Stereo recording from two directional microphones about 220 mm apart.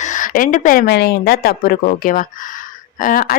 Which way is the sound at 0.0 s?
35° left (ahead or behind).